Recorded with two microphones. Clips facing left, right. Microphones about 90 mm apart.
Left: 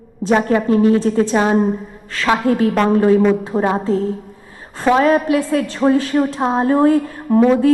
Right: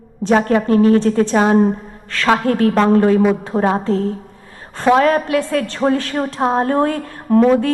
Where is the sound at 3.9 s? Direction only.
60° right (ahead or behind).